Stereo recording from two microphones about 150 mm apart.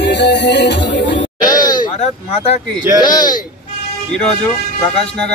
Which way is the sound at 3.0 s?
30° left (ahead or behind).